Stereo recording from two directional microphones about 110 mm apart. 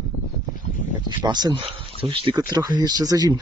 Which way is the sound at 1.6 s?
55° right (ahead or behind).